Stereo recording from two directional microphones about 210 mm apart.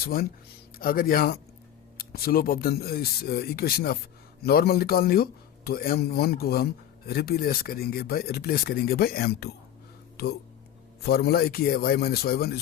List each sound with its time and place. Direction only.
0.0 s speech: 45° left (ahead or behind)
11.0 s speech: 50° left (ahead or behind)